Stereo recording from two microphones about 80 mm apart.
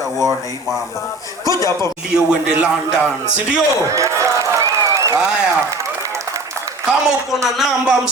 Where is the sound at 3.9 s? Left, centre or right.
Right.